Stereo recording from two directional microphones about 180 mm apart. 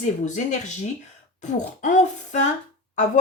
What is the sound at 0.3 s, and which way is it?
A woman's voice, 40° left (ahead or behind).